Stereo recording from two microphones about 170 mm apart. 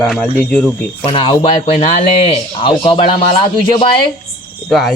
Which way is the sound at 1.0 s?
30° left (ahead or behind).